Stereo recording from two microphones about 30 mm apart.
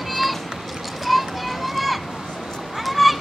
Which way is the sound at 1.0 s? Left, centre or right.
Centre.